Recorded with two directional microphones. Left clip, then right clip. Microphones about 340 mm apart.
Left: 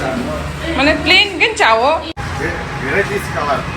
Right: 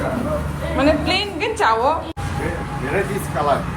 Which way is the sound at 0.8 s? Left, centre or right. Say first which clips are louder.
Left 7 dB; centre.